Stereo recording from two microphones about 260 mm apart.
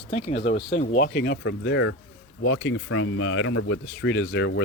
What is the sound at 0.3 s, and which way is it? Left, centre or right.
Speech, left.